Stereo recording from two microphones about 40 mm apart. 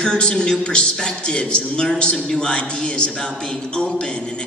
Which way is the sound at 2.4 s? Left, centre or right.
Left.